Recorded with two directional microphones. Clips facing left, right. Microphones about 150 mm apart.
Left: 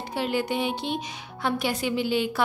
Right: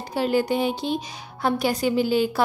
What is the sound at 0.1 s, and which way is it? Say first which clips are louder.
A woman's voice: right 5 dB; 40° right (ahead or behind).